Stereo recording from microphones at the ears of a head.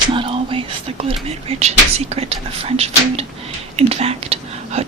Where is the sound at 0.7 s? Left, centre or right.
Right.